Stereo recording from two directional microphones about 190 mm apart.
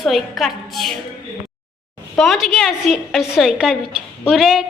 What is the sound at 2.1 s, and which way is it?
A woman's voice, centre (ahead or behind).